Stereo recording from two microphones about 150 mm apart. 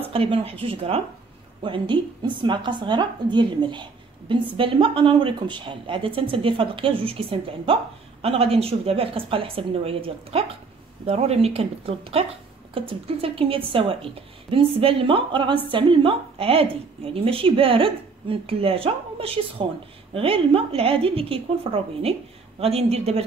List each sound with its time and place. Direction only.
0.1 s a woman's voice: 40° right (ahead or behind)